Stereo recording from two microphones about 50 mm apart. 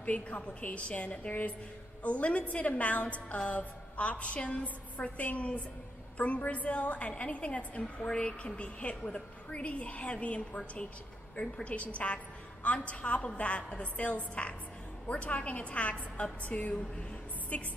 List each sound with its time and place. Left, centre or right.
0.0 s a woman's voice: left